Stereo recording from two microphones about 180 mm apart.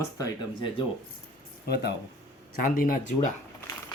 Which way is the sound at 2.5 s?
50° left (ahead or behind).